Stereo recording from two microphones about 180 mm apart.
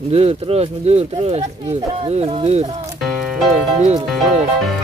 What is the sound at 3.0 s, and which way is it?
Music, centre (ahead or behind).